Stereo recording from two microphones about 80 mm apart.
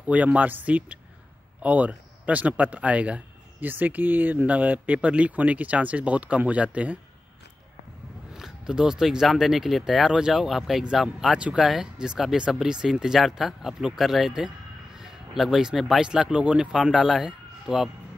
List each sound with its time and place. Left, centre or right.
0.0 s speech: centre
8.3 s speech: centre